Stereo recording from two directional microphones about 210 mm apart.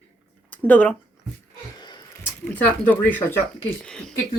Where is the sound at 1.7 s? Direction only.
20° left (ahead or behind).